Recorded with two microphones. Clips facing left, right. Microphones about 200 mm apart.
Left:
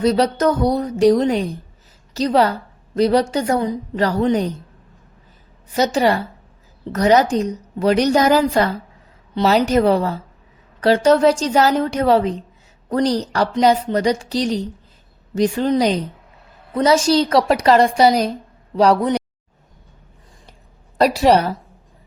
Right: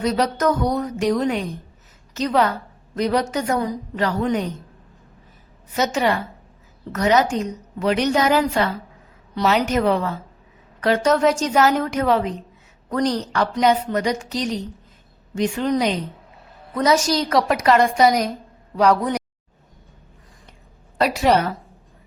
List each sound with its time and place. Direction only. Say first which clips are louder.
0.0 s a woman's voice: left 4 dB; 30° left (ahead or behind)
5.7 s a woman's voice: left 4 dB; 35° left (ahead or behind)
21.0 s a woman's voice: left 4 dB; 35° left (ahead or behind)